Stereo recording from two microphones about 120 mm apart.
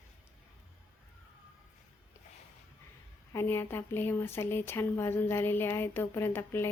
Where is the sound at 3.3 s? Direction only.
20° left (ahead or behind).